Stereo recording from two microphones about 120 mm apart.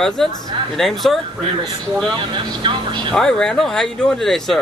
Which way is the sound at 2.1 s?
40° right (ahead or behind).